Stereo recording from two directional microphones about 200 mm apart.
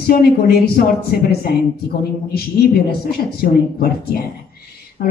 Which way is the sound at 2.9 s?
50° left (ahead or behind).